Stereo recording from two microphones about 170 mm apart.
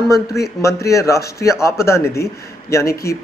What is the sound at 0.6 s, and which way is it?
Speech, 15° left (ahead or behind).